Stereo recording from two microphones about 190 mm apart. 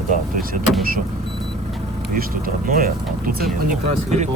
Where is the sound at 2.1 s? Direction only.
50° right (ahead or behind).